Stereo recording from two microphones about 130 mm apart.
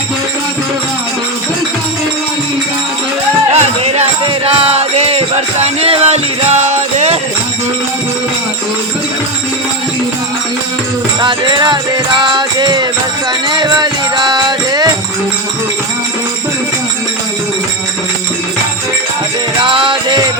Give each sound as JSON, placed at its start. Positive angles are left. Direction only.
{"t": 3.5, "sound": "music", "side_deg": -55}
{"t": 11.2, "sound": "music", "side_deg": -35}
{"t": 19.6, "sound": "music", "side_deg": -40}